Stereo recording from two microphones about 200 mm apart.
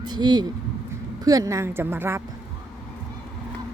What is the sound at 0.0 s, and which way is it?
Speech, 20° right (ahead or behind).